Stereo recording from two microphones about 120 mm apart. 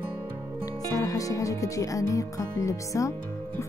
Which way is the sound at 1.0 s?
30° left (ahead or behind).